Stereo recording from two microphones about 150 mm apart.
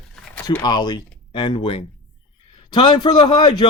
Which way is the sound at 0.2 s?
5° left (ahead or behind).